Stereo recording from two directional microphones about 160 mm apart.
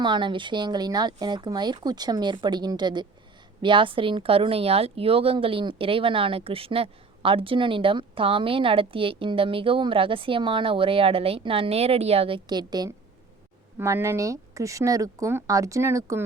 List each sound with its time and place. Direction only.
0.0 s speech: 30° right (ahead or behind)